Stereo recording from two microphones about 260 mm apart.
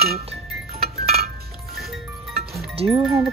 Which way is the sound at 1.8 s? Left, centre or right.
Centre.